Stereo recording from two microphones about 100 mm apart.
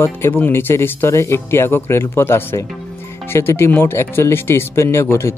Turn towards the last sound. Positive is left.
turn(degrees=25)  # may be behind; listen again after turning